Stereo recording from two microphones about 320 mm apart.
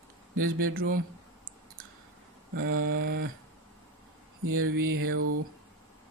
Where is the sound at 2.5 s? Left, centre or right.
Right.